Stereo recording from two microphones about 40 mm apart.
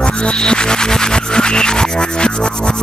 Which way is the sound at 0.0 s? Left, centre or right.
Left.